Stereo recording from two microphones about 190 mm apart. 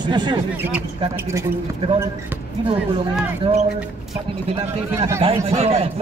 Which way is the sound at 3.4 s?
25° right (ahead or behind).